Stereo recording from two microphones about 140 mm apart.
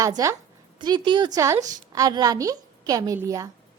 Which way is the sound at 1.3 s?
20° right (ahead or behind).